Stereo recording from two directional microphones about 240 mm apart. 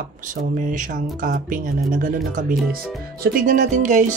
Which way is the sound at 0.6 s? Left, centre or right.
Right.